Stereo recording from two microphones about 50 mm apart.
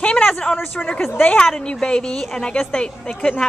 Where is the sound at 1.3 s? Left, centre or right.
Centre.